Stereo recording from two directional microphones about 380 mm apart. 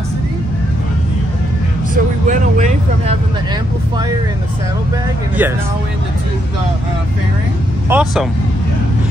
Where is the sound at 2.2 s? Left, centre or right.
Centre.